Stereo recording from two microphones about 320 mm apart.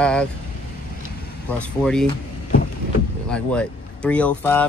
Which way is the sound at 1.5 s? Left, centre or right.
Centre.